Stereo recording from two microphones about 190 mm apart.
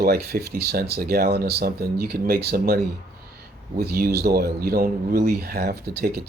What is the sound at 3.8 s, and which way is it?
Speech, 55° right (ahead or behind).